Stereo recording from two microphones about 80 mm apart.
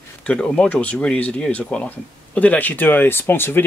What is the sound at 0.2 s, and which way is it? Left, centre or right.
Speech, centre.